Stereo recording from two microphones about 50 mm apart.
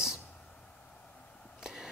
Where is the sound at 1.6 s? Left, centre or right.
Centre.